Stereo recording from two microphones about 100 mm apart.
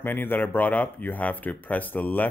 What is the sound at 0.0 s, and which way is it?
Speech, 20° left (ahead or behind).